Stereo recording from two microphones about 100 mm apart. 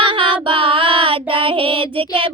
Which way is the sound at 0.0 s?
55° right (ahead or behind).